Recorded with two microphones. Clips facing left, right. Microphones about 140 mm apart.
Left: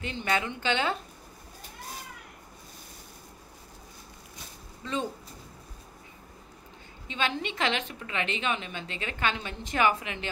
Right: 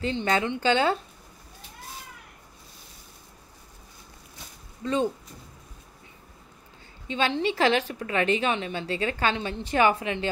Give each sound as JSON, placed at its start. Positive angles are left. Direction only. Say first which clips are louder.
{"t": 0.0, "sound": "a woman's voice", "louder": "right 5 dB", "side_deg": -30}
{"t": 7.1, "sound": "a woman's voice", "louder": "right 6 dB", "side_deg": -30}